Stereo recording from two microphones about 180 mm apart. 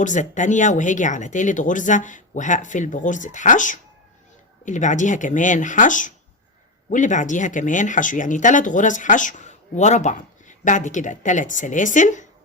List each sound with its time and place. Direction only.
0.0 s speech: 45° left (ahead or behind)